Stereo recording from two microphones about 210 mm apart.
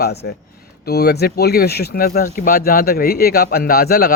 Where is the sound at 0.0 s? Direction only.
50° left (ahead or behind).